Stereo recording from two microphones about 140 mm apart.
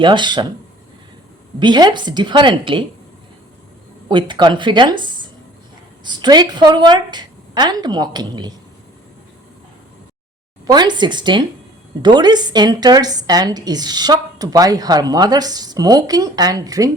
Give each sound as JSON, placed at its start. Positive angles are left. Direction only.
{"t": 0.0, "sound": "a woman's voice", "side_deg": -35}
{"t": 1.5, "sound": "a woman's voice", "side_deg": -30}
{"t": 4.1, "sound": "a woman's voice", "side_deg": -35}
{"t": 10.7, "sound": "a woman's voice", "side_deg": -30}